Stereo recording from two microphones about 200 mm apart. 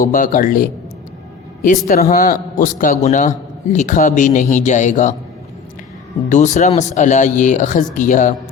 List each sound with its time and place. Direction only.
0.0 s speech: 45° left (ahead or behind)
1.9 s a man's voice: 45° left (ahead or behind)
6.2 s a man's voice: 40° left (ahead or behind)